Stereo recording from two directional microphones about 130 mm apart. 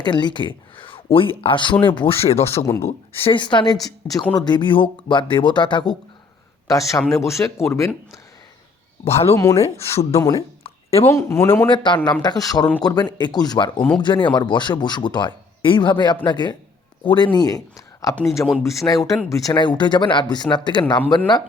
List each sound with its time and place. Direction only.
0.0 s speech: 35° left (ahead or behind); by 2.6 s 50° left (ahead or behind)
2.6 s speech: 20° left (ahead or behind)
3.1 s speech: 40° left (ahead or behind)
4.0 s speech: 15° left (ahead or behind)
4.4 s speech: 35° left (ahead or behind)
6.7 s speech: 25° left (ahead or behind)
9.0 s speech: 50° left (ahead or behind)
9.3 s speech: 25° left (ahead or behind)
9.6 s speech: 50° left (ahead or behind)
10.2 s speech: 25° left (ahead or behind)
11.7 s a man's voice: 35° left (ahead or behind)
18.4 s speech: 15° left (ahead or behind)
19.5 s speech: 35° left (ahead or behind)